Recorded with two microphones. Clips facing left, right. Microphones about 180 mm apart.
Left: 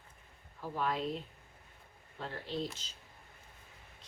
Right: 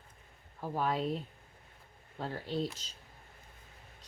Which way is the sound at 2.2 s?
35° right (ahead or behind).